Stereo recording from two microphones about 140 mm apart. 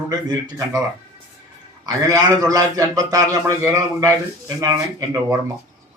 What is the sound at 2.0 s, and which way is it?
A man's voice, 25° right (ahead or behind).